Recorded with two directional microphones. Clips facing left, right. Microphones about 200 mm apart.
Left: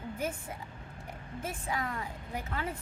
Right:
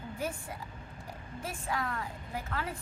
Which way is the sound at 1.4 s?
20° left (ahead or behind).